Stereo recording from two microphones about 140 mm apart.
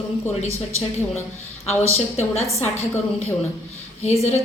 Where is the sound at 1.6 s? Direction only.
50° left (ahead or behind).